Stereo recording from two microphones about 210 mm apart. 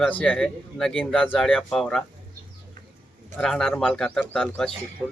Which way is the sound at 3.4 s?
5° left (ahead or behind).